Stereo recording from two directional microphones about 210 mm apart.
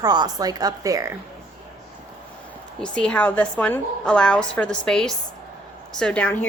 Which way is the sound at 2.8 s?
5° left (ahead or behind).